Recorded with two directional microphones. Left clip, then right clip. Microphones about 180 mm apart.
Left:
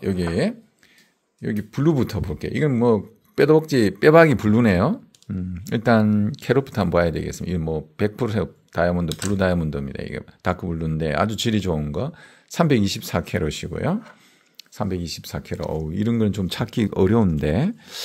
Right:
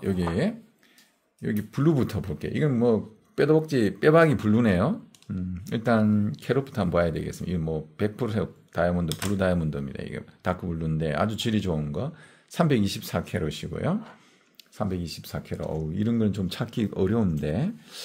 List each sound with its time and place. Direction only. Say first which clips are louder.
0.0 s speech: left 4 dB; 35° left (ahead or behind)